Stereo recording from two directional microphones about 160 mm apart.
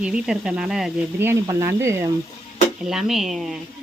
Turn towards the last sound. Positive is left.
turn(degrees=0)  # may be behind; listen again after turning